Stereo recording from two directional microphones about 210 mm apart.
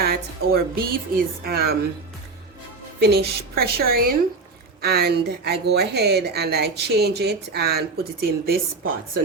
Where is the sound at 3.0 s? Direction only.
50° right (ahead or behind).